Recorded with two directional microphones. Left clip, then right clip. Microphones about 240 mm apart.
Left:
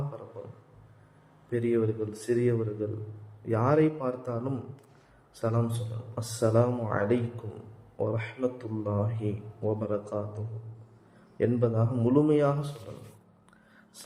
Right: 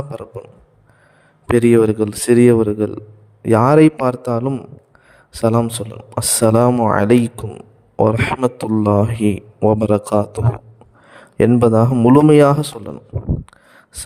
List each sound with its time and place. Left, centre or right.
1.5 s speech: right
11.3 s speech: right